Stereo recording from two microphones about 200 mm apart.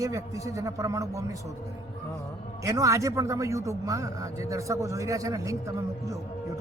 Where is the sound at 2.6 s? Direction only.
15° right (ahead or behind).